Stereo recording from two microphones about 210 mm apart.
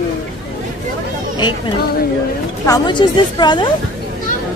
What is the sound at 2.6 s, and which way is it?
A woman's voice, 20° left (ahead or behind).